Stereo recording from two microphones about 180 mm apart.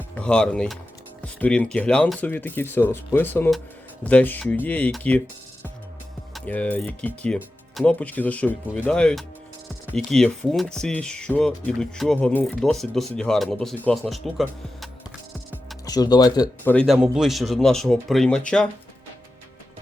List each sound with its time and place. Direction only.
0.2 s speech: 5° left (ahead or behind)
6.3 s speech: 5° left (ahead or behind)
15.9 s speech: 20° left (ahead or behind)
16.6 s speech: 5° left (ahead or behind)